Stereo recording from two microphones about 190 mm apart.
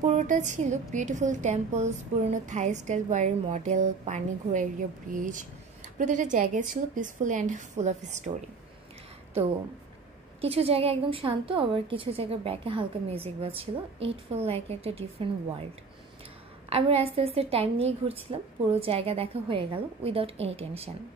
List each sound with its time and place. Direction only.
0.0 s a woman's voice: 40° right (ahead or behind)
10.4 s a woman's voice: 30° right (ahead or behind)
16.6 s a woman's voice: 30° right (ahead or behind)